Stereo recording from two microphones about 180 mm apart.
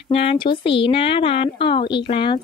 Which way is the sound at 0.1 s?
30° left (ahead or behind).